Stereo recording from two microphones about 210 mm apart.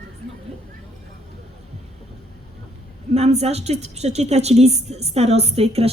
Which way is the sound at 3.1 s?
30° right (ahead or behind).